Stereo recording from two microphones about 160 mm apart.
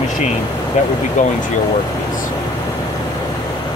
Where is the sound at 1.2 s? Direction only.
50° left (ahead or behind).